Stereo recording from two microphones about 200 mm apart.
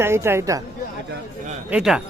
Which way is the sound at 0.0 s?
10° right (ahead or behind).